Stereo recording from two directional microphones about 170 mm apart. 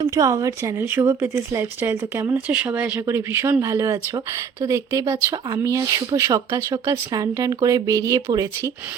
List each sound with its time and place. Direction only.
0.1 s speech: 20° right (ahead or behind)